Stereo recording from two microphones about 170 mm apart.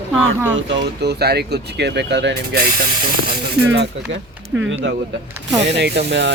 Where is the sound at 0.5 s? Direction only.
85° right.